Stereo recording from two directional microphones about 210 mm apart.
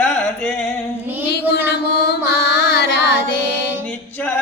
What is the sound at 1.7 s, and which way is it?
Mantra, 50° left (ahead or behind).